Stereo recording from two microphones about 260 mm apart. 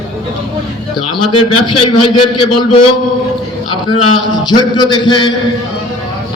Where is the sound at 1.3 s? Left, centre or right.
Left.